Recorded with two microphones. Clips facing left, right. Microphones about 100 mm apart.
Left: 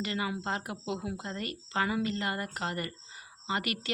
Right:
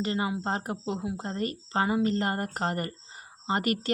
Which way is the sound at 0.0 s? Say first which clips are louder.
Right 4 dB; 35° right (ahead or behind).